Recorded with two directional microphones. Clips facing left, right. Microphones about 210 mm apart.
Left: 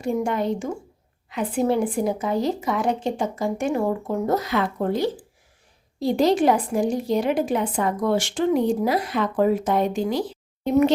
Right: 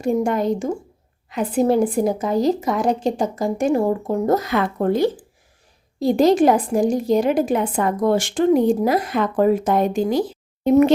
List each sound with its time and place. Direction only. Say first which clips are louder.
0.0 s a woman's voice: right 4 dB; 45° right (ahead or behind)